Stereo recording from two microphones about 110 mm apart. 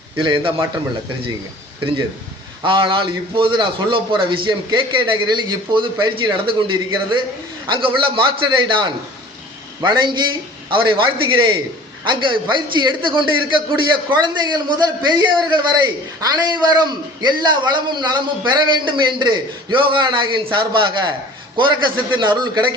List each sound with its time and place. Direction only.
0.2 s a man's voice: 50° right (ahead or behind)
2.6 s a man's voice: 45° right (ahead or behind)
22.1 s a man's voice: 45° right (ahead or behind)